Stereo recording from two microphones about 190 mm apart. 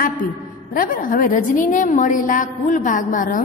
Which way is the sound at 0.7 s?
45° left (ahead or behind).